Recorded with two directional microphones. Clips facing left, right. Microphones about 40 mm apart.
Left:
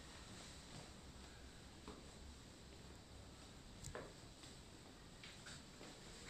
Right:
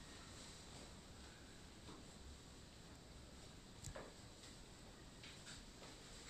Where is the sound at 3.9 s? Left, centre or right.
Left.